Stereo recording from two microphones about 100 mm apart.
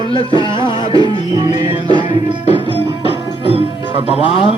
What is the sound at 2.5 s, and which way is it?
Music, 60° right (ahead or behind).